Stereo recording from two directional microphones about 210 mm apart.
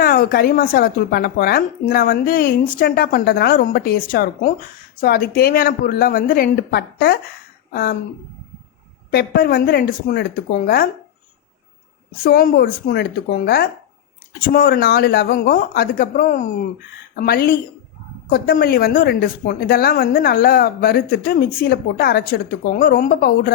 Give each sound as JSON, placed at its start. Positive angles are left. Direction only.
{"t": 0.0, "sound": "speech", "side_deg": 45}
{"t": 9.0, "sound": "speech", "side_deg": 50}
{"t": 12.2, "sound": "speech", "side_deg": 45}